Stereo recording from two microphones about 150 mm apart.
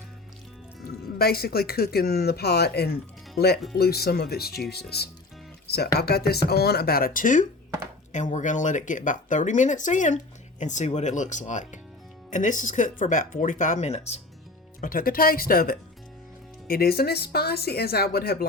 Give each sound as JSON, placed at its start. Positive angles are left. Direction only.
{"t": 1.2, "sound": "speech", "side_deg": 90}
{"t": 14.8, "sound": "speech", "side_deg": 70}
{"t": 16.6, "sound": "speech", "side_deg": 90}